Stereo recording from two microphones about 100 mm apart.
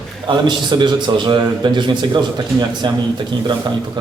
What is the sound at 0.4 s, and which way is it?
A man's voice, 50° right (ahead or behind).